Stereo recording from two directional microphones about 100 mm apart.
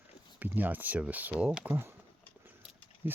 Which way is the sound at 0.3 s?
15° right (ahead or behind).